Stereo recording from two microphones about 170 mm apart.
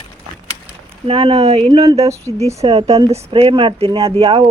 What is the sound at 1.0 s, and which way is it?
Speech, 35° right (ahead or behind).